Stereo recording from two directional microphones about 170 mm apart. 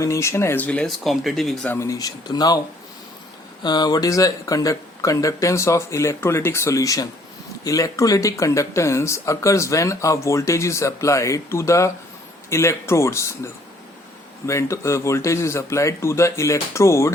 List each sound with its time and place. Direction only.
0.0 s speech: 15° left (ahead or behind); by 1.7 s centre (ahead or behind)
1.7 s speech: 20° left (ahead or behind)
3.6 s speech: 25° left (ahead or behind)